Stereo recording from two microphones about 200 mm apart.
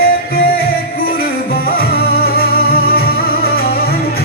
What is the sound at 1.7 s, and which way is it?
Music, 50° left (ahead or behind).